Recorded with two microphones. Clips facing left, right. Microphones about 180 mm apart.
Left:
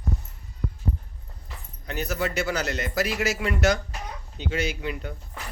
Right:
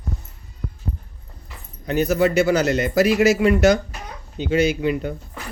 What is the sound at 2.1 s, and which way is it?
A man's voice, 10° right (ahead or behind).